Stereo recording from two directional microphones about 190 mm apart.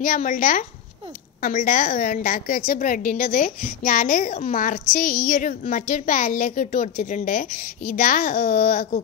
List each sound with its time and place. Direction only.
0.0 s a woman's voice: 45° left (ahead or behind)